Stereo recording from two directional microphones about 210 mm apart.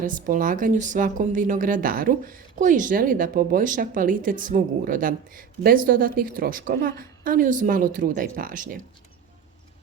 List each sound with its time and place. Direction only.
0.0 s speech: 40° right (ahead or behind)